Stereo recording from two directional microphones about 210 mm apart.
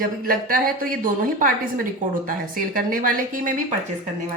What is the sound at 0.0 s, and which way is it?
Speech, 45° right (ahead or behind).